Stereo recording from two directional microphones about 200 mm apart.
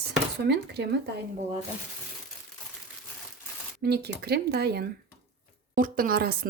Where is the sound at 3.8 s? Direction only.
55° right (ahead or behind).